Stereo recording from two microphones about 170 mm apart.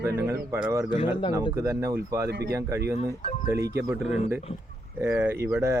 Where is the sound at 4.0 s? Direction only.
40° left (ahead or behind).